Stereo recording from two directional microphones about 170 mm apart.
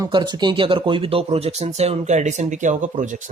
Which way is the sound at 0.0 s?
25° right (ahead or behind).